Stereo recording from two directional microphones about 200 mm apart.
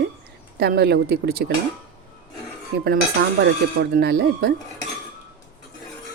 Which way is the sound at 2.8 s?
55° right (ahead or behind).